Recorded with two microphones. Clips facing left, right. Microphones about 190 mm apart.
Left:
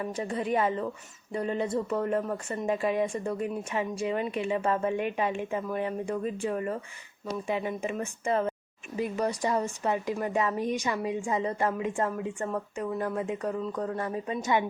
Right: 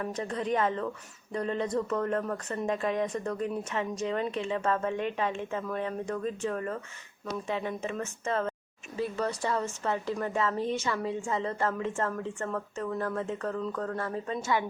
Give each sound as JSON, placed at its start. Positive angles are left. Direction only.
{"t": 0.0, "sound": "a woman's voice", "side_deg": 10}